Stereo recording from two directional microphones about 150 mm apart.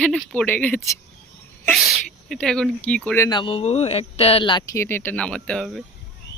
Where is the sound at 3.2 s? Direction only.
30° left (ahead or behind).